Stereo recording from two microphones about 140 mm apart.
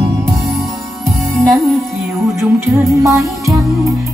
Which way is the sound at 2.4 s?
20° right (ahead or behind).